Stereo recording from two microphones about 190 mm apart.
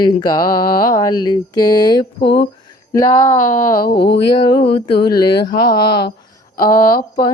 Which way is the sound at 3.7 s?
55° left (ahead or behind).